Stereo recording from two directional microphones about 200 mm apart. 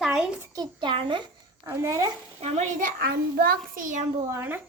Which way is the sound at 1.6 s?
15° right (ahead or behind).